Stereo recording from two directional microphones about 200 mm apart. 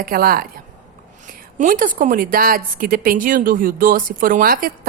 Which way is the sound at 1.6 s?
40° right (ahead or behind).